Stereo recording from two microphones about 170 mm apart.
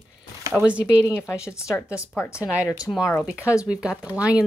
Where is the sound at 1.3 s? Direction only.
15° left (ahead or behind).